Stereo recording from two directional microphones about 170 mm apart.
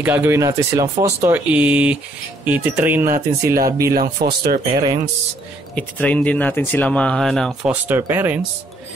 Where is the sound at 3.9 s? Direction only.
60° right (ahead or behind).